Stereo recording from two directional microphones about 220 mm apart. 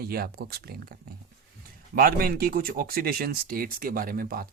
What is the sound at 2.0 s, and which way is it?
Speech, 45° right (ahead or behind).